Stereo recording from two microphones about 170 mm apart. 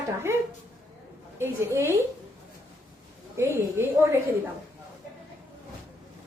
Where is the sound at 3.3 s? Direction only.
15° right (ahead or behind).